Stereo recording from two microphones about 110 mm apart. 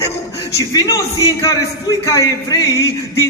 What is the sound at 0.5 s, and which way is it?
A man's voice, 35° left (ahead or behind).